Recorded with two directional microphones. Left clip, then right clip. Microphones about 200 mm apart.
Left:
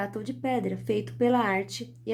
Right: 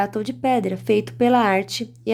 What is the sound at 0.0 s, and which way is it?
Speech, 30° right (ahead or behind).